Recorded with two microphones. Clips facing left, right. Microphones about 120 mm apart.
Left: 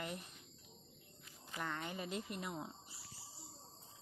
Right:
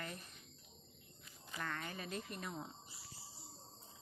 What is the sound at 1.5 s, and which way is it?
Speech, 15° left (ahead or behind).